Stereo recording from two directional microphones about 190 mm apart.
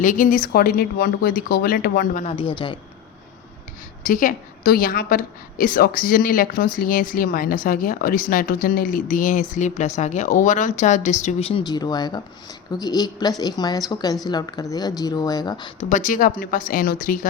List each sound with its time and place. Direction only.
0.0 s a woman's voice: 45° left (ahead or behind)
2.2 s speech: 30° left (ahead or behind)
4.0 s a woman's voice: 45° left (ahead or behind); by 15.7 s 20° left (ahead or behind)
15.8 s a woman's voice: 40° left (ahead or behind)